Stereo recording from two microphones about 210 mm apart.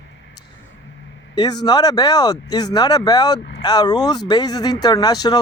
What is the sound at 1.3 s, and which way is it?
Speech, 20° left (ahead or behind).